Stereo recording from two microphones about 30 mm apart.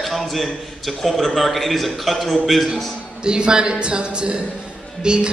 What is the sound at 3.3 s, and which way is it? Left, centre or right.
A man's voice, right.